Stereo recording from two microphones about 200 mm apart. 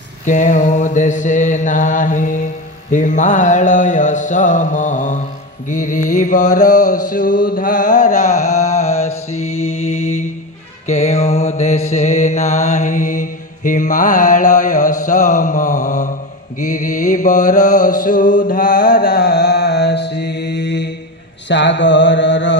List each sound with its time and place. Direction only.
0.2 s mantra: 40° left (ahead or behind)
9.5 s mantra: 90° left
10.9 s mantra: 35° left (ahead or behind); by 22.6 s 65° left (ahead or behind)